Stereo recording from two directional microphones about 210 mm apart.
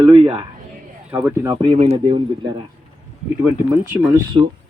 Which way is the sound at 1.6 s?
25° right (ahead or behind).